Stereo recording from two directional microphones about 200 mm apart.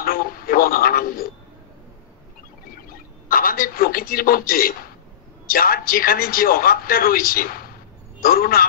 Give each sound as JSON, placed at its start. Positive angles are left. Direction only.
{"t": 0.0, "sound": "speech", "side_deg": 45}
{"t": 3.3, "sound": "a man's voice", "side_deg": 45}